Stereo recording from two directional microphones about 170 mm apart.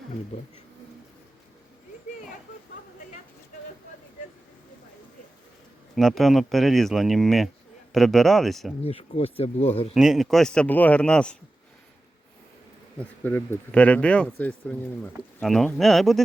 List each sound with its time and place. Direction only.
5.9 s speech: centre (ahead or behind)
8.8 s speech: 35° left (ahead or behind)
9.9 s speech: centre (ahead or behind)
13.0 s speech: 10° left (ahead or behind)